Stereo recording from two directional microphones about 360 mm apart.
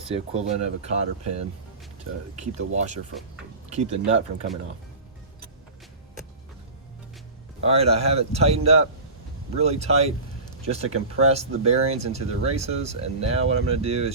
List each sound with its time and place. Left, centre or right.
0.1 s speech: centre
7.6 s speech: centre